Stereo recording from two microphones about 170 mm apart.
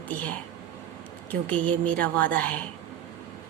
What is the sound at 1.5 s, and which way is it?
A woman's voice, 10° left (ahead or behind).